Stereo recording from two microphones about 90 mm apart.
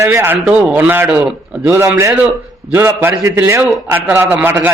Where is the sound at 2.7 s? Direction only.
20° right (ahead or behind).